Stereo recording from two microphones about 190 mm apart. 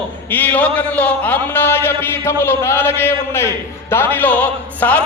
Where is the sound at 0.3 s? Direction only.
10° left (ahead or behind).